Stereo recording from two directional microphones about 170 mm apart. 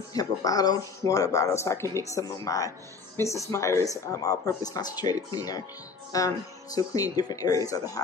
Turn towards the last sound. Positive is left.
turn(degrees=20)  # may be behind; listen again after turning